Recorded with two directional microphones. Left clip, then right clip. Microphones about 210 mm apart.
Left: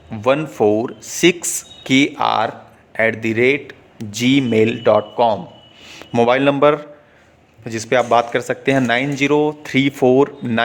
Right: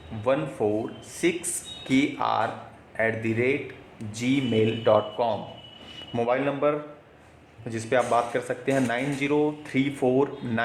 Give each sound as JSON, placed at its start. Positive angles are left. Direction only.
{"t": 0.2, "sound": "a man's voice", "side_deg": 40}
{"t": 7.6, "sound": "a man's voice", "side_deg": 30}